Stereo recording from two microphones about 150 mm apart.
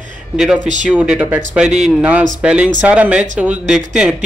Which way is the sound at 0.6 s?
55° right (ahead or behind).